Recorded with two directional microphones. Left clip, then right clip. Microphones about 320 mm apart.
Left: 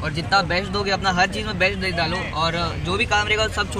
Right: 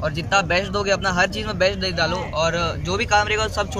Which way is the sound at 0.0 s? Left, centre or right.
Centre.